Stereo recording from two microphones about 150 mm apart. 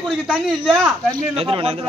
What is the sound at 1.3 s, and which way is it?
Speech, 35° right (ahead or behind).